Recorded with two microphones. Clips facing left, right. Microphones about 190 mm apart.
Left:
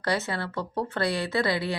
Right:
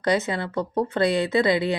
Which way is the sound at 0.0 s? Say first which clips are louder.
Right 5 dB; 20° right (ahead or behind).